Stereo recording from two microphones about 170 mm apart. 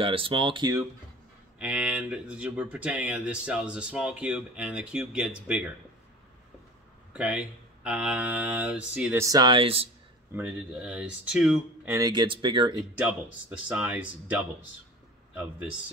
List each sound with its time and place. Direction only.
0.0 s speech: 30° right (ahead or behind)
1.6 s speech: 5° right (ahead or behind)
7.2 s speech: 5° right (ahead or behind)
9.2 s speech: 25° right (ahead or behind)
10.3 s speech: 10° right (ahead or behind)
11.9 s speech: 25° right (ahead or behind)
12.9 s speech: 10° right (ahead or behind)